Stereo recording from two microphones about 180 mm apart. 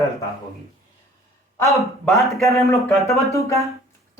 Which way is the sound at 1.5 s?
15° left (ahead or behind).